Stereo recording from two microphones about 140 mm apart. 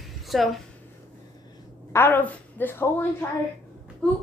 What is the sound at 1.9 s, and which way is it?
Speech, 15° left (ahead or behind).